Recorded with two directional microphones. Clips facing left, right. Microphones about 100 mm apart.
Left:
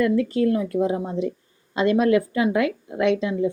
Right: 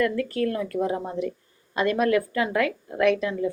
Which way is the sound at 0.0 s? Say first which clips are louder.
Left 4 dB; 20° left (ahead or behind).